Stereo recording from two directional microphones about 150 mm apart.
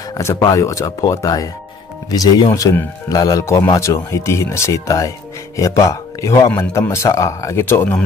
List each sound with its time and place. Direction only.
0.2 s speech: 25° left (ahead or behind)